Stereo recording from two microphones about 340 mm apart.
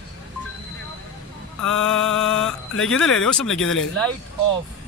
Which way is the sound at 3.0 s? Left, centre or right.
Centre.